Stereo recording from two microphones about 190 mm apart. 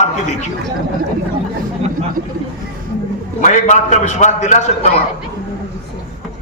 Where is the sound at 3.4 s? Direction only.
40° left (ahead or behind).